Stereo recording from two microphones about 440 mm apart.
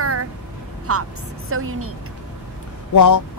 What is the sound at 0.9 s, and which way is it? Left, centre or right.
Speech, right.